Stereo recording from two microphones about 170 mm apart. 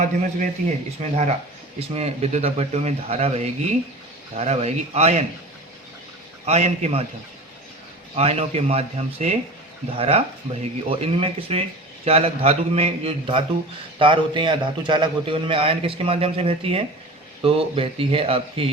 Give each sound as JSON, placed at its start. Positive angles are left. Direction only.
{"t": 0.0, "sound": "a man's voice", "side_deg": -45}
{"t": 6.4, "sound": "a man's voice", "side_deg": -40}
{"t": 8.1, "sound": "a man's voice", "side_deg": -35}